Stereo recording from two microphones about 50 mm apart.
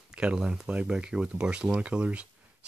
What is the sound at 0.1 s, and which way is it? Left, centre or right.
Speech, centre.